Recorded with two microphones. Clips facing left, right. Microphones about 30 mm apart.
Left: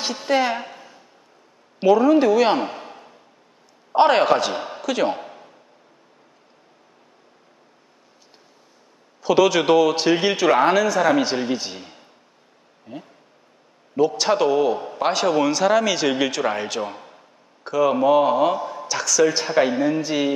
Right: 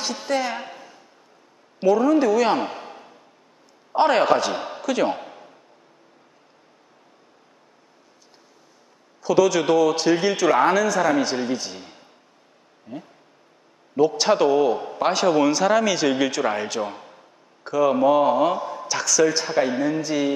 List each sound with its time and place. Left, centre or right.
0.3 s a man's voice: left
0.6 s a sound: centre
1.8 s a man's voice: left
2.6 s a sound: centre
3.9 s a man's voice: centre
9.2 s a man's voice: left
11.8 s a sound: centre
12.8 s speech: centre
13.9 s a man's voice: centre
19.3 s a man's voice: centre